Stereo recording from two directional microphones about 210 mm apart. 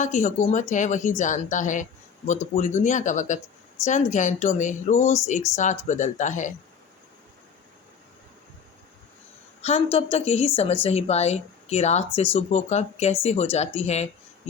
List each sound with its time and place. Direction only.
0.0 s speech: 35° left (ahead or behind)
9.6 s a woman's voice: 30° left (ahead or behind)